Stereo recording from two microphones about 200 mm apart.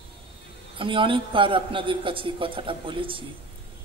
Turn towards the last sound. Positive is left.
turn(degrees=-25)  # may be behind; listen again after turning